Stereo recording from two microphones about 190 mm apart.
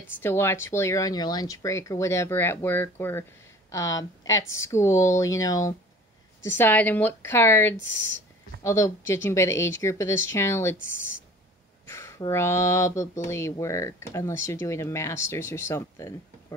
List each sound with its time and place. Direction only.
0.2 s speech: 10° left (ahead or behind)
7.7 s speech: 75° left (ahead or behind)
8.6 s speech: 15° left (ahead or behind)
10.8 s speech: 90° left
11.9 s speech: 15° left (ahead or behind)